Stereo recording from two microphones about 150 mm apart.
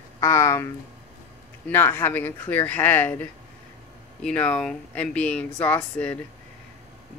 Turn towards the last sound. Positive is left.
turn(degrees=10)  # may be behind; listen again after turning